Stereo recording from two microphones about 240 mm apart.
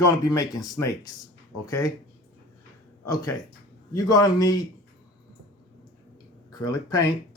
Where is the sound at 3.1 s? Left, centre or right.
Centre.